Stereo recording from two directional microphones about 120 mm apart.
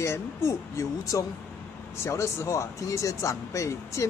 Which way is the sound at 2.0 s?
25° left (ahead or behind).